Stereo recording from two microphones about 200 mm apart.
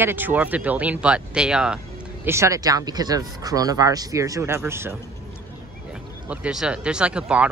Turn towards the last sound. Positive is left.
turn(degrees=-5)  # may be behind; listen again after turning